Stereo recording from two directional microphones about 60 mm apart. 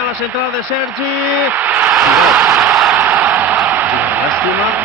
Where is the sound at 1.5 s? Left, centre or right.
Right.